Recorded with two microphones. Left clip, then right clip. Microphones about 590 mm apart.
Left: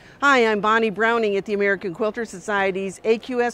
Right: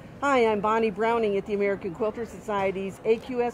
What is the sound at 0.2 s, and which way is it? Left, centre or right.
A woman's voice, left.